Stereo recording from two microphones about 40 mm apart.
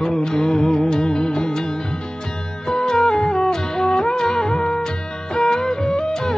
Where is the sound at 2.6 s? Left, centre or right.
Centre.